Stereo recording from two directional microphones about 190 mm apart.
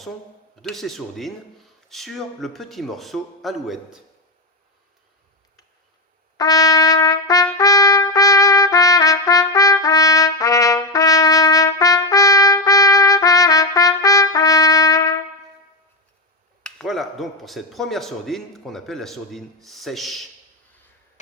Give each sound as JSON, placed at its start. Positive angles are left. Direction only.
{"t": 0.6, "sound": "speech", "side_deg": 0}
{"t": 6.3, "sound": "trumpet", "side_deg": 20}
{"t": 16.6, "sound": "speech", "side_deg": 0}